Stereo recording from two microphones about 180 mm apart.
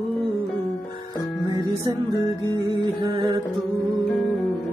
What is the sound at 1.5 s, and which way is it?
Music, 20° right (ahead or behind).